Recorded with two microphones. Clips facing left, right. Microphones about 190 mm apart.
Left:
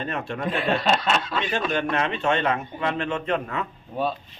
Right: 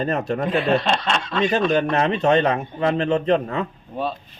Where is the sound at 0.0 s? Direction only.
40° right (ahead or behind).